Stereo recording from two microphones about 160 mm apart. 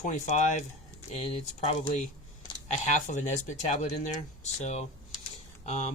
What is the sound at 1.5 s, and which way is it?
Speech, 35° left (ahead or behind).